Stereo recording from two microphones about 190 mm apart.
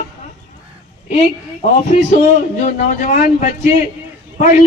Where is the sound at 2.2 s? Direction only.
45° left (ahead or behind).